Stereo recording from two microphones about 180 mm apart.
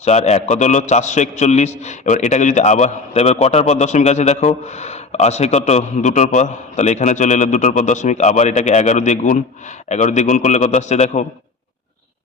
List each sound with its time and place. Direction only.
0.0 s a man's voice: 40° left (ahead or behind)